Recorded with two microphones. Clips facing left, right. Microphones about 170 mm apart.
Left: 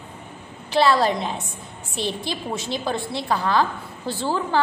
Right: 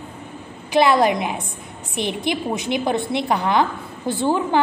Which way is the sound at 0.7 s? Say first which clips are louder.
Right 3 dB; 15° right (ahead or behind).